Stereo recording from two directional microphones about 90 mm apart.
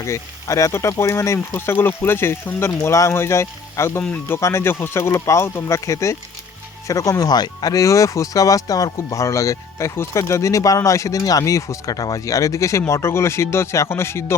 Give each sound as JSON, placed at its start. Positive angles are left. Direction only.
{"t": 0.0, "sound": "speech", "side_deg": 35}